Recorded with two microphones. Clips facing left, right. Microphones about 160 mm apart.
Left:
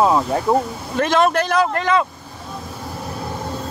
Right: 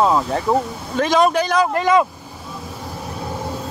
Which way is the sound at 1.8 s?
10° right (ahead or behind).